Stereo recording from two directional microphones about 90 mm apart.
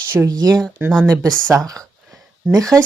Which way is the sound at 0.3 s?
45° right (ahead or behind).